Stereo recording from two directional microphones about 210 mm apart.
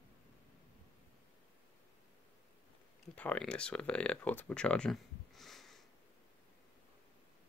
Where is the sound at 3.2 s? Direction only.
5° left (ahead or behind).